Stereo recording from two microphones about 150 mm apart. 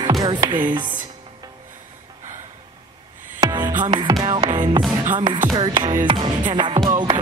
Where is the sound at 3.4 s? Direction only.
30° right (ahead or behind).